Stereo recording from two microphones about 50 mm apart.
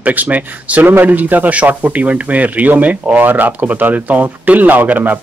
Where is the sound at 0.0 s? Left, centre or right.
Right.